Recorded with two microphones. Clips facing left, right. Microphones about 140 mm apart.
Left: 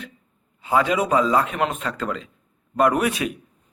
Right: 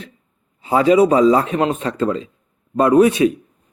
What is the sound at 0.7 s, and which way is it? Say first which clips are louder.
A man's voice: right 7 dB; 30° right (ahead or behind).